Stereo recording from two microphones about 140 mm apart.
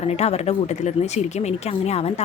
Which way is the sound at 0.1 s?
50° left (ahead or behind).